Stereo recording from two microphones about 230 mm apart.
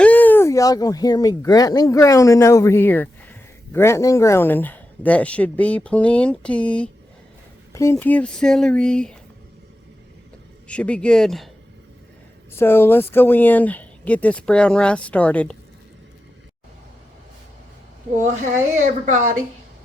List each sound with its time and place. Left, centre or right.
0.0 s speech: centre
10.7 s speech: centre
12.5 s speech: centre
19.1 s a woman's voice: right